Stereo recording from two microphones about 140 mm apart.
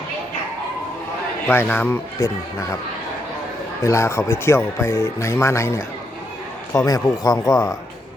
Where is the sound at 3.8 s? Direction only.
20° left (ahead or behind).